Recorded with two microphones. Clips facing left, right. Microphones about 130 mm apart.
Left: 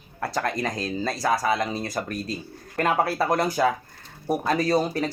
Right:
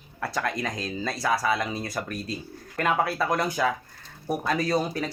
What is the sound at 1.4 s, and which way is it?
Speech, 25° left (ahead or behind).